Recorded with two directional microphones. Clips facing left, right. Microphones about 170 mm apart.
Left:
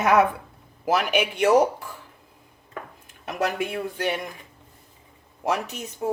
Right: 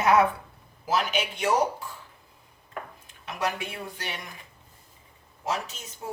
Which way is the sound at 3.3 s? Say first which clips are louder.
Left 5 dB; 55° left (ahead or behind).